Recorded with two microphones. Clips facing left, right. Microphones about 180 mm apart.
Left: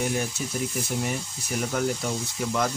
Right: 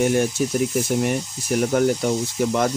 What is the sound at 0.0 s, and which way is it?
Speech, 70° right (ahead or behind).